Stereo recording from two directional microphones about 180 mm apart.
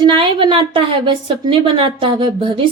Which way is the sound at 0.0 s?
25° right (ahead or behind).